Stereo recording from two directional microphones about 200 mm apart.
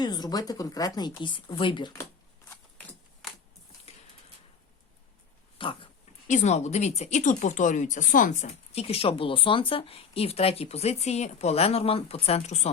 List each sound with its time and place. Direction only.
0.0 s speech: 20° left (ahead or behind)
2.7 s a sound: 5° left (ahead or behind)
5.5 s speech: 25° left (ahead or behind)